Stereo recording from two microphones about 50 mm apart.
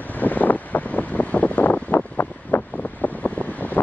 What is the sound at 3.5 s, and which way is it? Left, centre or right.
Wind, left.